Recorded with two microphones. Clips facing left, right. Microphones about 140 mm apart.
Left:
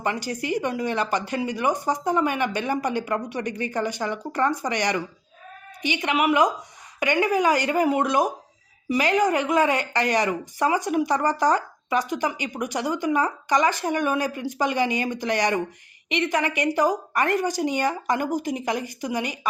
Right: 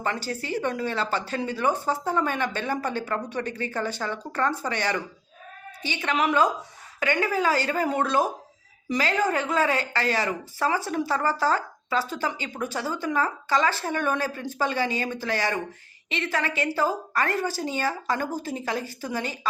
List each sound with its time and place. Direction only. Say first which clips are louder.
0.0 s a woman's voice: left 2 dB; 15° left (ahead or behind)